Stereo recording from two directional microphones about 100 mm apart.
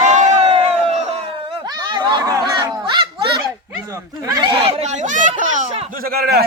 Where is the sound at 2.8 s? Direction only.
50° right (ahead or behind).